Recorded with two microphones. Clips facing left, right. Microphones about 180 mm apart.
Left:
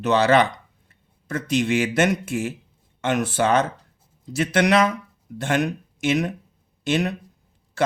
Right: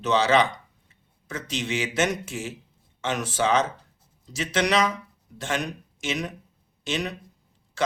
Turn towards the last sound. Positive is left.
turn(degrees=55)  # may be behind; listen again after turning